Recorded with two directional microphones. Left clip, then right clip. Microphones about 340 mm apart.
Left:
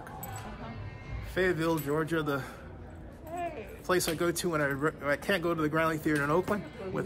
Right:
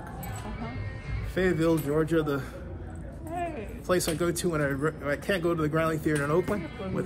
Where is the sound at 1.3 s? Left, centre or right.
Centre.